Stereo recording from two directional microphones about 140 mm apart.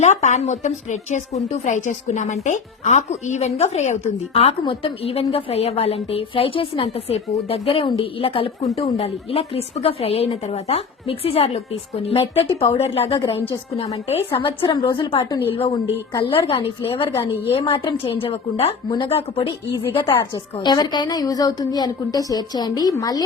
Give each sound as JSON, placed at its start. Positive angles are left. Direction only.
{"t": 0.0, "sound": "a woman's voice", "side_deg": 55}
{"t": 4.4, "sound": "a woman's voice", "side_deg": 40}
{"t": 14.4, "sound": "a woman's voice", "side_deg": 35}